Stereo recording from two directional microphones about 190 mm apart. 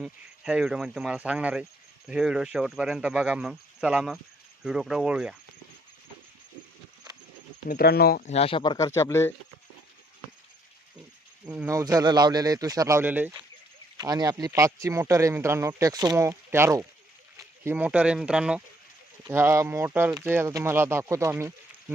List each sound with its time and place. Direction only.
0.0 s speech: 5° right (ahead or behind)
7.7 s speech: 55° left (ahead or behind)
8.2 s speech: 35° left (ahead or behind); by 9.3 s 15° left (ahead or behind)
11.4 s speech: 15° right (ahead or behind)
13.9 s speech: 20° right (ahead or behind)